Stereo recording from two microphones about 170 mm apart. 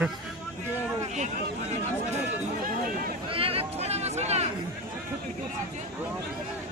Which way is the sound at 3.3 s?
35° right (ahead or behind).